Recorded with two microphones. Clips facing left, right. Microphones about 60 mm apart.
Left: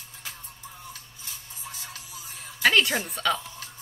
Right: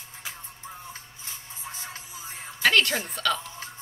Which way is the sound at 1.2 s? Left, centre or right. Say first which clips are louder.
Right 1 dB; right.